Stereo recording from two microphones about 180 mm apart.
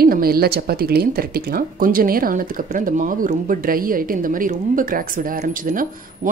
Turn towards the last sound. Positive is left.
turn(degrees=-50)  # may be behind; listen again after turning